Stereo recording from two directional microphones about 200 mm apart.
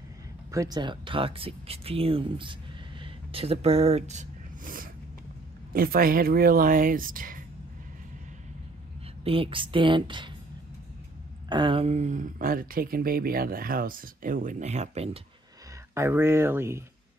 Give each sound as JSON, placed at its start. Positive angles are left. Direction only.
{"t": 0.5, "sound": "speech", "side_deg": -15}
{"t": 3.0, "sound": "a sound", "side_deg": -30}
{"t": 5.7, "sound": "speech", "side_deg": -45}
{"t": 9.2, "sound": "speech", "side_deg": -25}
{"t": 11.4, "sound": "speech", "side_deg": -25}
{"t": 15.9, "sound": "speech", "side_deg": -10}